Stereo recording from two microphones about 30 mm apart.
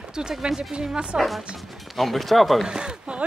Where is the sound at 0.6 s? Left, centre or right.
Right.